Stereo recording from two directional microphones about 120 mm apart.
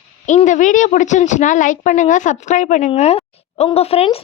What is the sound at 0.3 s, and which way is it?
A woman's voice, 90° left.